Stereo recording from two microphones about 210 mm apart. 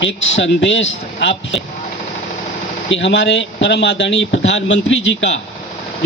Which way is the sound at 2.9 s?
55° left (ahead or behind).